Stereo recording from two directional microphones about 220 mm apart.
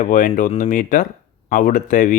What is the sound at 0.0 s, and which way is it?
Speech, 35° left (ahead or behind).